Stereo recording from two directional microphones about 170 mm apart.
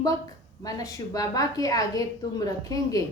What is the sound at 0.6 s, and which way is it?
A woman's voice, 20° left (ahead or behind).